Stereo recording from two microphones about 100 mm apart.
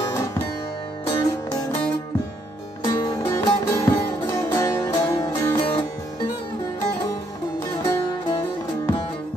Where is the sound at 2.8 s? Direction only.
45° left (ahead or behind).